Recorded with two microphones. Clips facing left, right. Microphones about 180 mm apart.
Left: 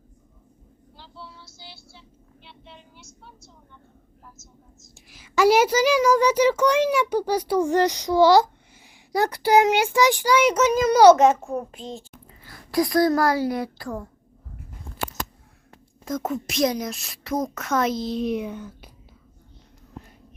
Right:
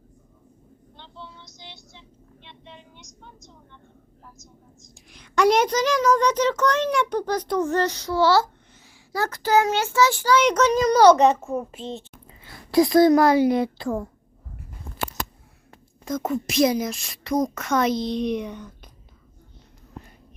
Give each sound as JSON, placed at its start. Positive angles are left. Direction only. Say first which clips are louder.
{"t": 0.9, "sound": "vehicle", "louder": "right 1 dB", "side_deg": 5}
{"t": 3.0, "sound": "vehicle", "louder": "right 1 dB", "side_deg": 10}
{"t": 4.4, "sound": "a woman's voice", "louder": "right 2 dB", "side_deg": 5}
{"t": 12.3, "sound": "a woman's voice", "louder": "right 5 dB", "side_deg": -25}
{"t": 16.0, "sound": "a woman's voice", "louder": "right 1 dB", "side_deg": 0}